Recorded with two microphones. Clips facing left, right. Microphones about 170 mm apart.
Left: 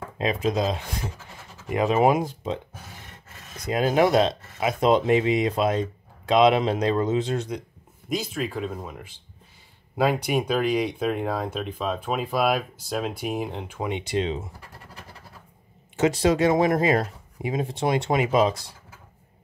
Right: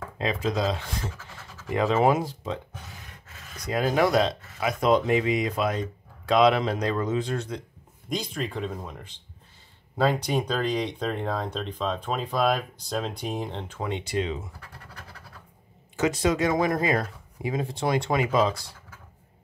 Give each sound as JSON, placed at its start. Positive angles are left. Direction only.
{"t": 0.2, "sound": "speech", "side_deg": 20}
{"t": 8.1, "sound": "speech", "side_deg": 5}
{"t": 16.0, "sound": "speech", "side_deg": 30}